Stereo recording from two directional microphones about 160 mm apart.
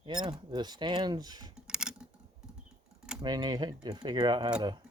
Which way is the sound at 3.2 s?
25° right (ahead or behind).